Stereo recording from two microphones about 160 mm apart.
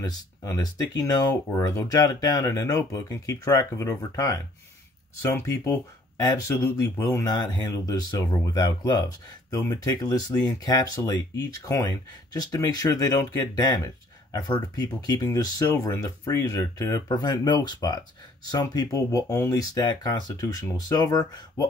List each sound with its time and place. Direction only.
0.0 s speech: 25° left (ahead or behind)